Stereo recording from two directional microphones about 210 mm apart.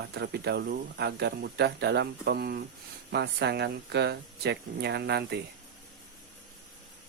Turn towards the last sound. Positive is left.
turn(degrees=-50)  # may be behind; listen again after turning